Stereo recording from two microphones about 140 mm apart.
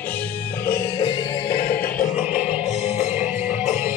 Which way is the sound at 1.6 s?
90° left.